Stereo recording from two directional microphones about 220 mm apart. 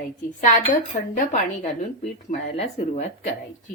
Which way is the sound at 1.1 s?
35° left (ahead or behind).